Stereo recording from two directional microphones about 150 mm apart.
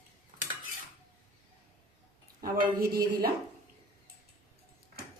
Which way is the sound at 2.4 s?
85° right.